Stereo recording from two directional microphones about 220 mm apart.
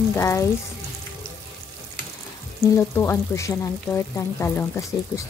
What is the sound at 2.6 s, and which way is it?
Speech, 15° left (ahead or behind).